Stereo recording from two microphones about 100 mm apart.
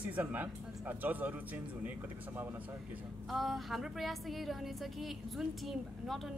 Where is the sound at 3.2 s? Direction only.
Centre (ahead or behind).